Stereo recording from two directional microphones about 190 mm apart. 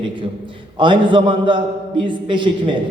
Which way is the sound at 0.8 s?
25° right (ahead or behind).